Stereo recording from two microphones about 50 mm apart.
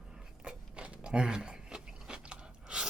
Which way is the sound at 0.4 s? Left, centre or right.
Right.